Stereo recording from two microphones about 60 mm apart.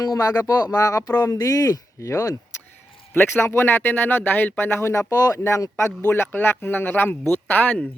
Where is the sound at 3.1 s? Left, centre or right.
Left.